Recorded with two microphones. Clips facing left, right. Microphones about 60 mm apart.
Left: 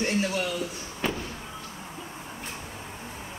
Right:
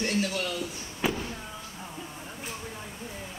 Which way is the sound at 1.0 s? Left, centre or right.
Centre.